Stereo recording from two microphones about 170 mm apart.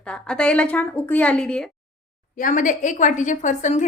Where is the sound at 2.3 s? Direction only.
50° left (ahead or behind).